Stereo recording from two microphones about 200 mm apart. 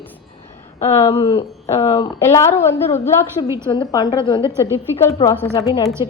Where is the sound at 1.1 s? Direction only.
30° left (ahead or behind).